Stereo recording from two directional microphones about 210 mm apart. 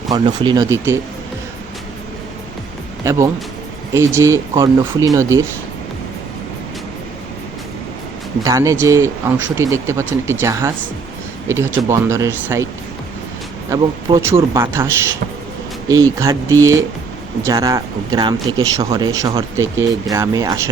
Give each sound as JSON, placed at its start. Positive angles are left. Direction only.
{"t": 0.1, "sound": "speech", "side_deg": -20}
{"t": 3.0, "sound": "speech", "side_deg": -15}
{"t": 8.4, "sound": "speech", "side_deg": -15}
{"t": 13.7, "sound": "speech", "side_deg": -15}
{"t": 16.1, "sound": "speech", "side_deg": -15}